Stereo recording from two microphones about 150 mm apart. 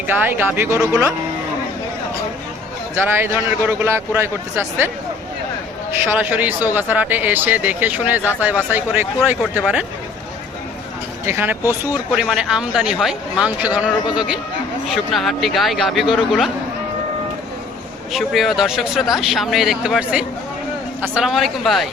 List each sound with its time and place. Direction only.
0.2 s speech: 15° right (ahead or behind)
3.2 s speech: 15° right (ahead or behind)
6.1 s speech: 10° right (ahead or behind)
11.3 s speech: 15° right (ahead or behind)
18.1 s speech: centre (ahead or behind)